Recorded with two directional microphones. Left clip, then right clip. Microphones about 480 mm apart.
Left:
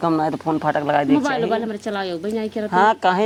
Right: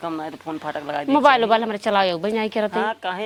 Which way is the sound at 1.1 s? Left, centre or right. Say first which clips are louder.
Right 4 dB; right.